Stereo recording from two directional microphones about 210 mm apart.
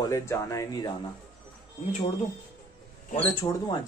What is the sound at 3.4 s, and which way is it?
Speech, 20° left (ahead or behind).